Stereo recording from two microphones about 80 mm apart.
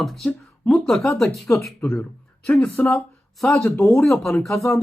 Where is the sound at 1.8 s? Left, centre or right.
Left.